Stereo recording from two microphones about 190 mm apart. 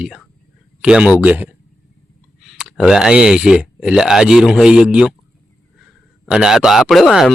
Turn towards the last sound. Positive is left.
turn(degrees=0)  # may be behind; listen again after turning